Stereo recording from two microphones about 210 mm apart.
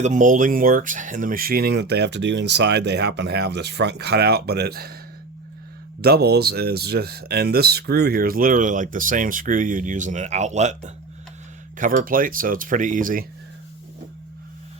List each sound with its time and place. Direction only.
0.0 s speech: 35° right (ahead or behind)
6.0 s speech: 50° right (ahead or behind)